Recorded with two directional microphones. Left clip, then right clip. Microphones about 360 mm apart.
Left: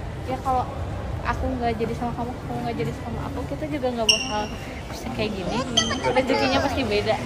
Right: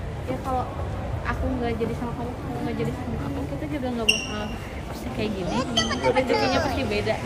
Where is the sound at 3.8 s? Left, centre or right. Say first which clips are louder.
Left 3 dB; centre.